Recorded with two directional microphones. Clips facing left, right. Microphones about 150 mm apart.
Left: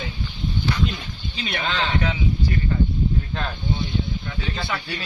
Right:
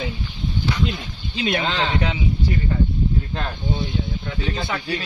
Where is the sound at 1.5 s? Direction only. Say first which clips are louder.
Right 4 dB; 20° right (ahead or behind).